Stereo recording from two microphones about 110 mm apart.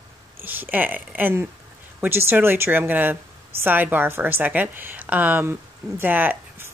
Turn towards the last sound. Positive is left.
turn(degrees=-20)  # may be behind; listen again after turning